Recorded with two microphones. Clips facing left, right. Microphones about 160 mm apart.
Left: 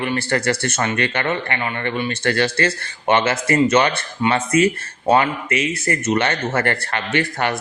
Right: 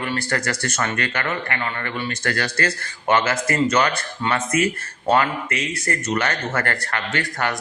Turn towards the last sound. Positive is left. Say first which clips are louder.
# left 4 dB
turn(degrees=25)  # may be behind; listen again after turning